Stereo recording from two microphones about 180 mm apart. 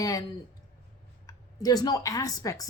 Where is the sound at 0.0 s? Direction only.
20° left (ahead or behind).